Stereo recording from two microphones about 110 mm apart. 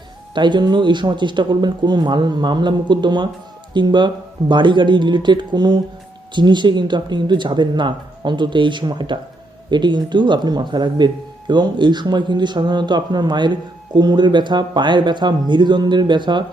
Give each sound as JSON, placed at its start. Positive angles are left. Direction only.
{"t": 0.3, "sound": "speech", "side_deg": -45}